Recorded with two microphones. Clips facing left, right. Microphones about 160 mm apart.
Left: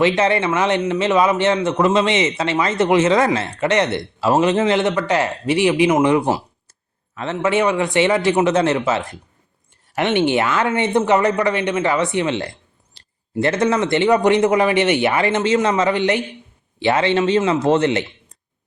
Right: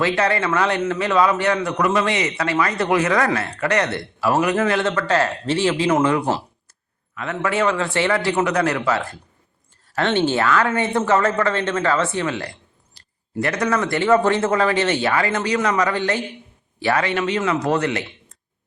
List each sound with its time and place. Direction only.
0.0 s a man's voice: 20° left (ahead or behind)
7.1 s speech: 30° left (ahead or behind)